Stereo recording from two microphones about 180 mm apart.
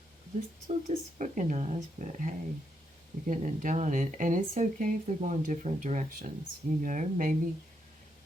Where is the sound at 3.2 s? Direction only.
45° right (ahead or behind).